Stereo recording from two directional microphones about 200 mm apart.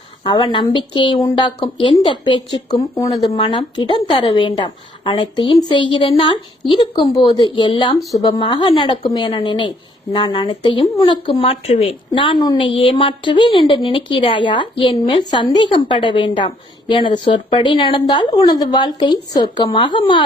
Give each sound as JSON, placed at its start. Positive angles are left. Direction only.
{"t": 0.3, "sound": "a woman's voice", "side_deg": 25}
{"t": 7.9, "sound": "speech", "side_deg": 0}
{"t": 8.2, "sound": "a woman's voice", "side_deg": 25}